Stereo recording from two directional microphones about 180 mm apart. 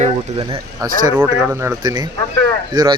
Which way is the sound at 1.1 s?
10° right (ahead or behind).